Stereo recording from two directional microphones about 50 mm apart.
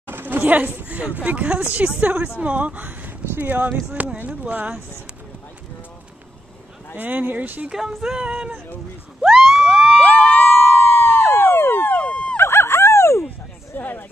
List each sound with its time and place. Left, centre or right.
0.0 s speech: right
7.0 s speech: right
7.7 s speech: centre
8.2 s speech: right
9.2 s a sound: centre
10.0 s a sound: left
12.1 s a sound: left
12.4 s dog: left
13.7 s speech: left